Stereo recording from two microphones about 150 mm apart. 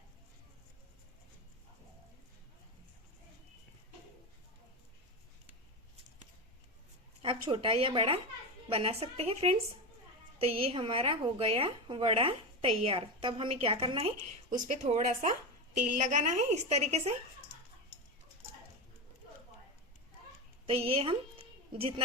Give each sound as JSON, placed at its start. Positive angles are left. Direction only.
{"t": 7.2, "sound": "speech", "side_deg": -35}
{"t": 14.5, "sound": "a woman's voice", "side_deg": -50}
{"t": 20.7, "sound": "a woman's voice", "side_deg": -40}